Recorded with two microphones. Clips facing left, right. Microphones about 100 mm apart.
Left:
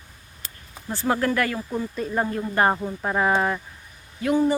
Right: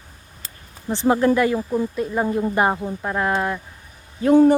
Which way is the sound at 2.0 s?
5° right (ahead or behind).